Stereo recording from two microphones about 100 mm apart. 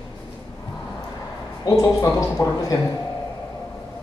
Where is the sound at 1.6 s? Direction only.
35° left (ahead or behind).